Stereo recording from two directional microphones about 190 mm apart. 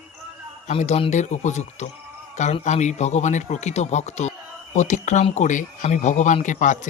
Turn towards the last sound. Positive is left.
turn(degrees=40)  # may be behind; listen again after turning